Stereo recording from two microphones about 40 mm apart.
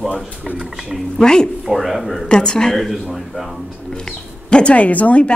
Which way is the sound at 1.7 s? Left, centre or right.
Centre.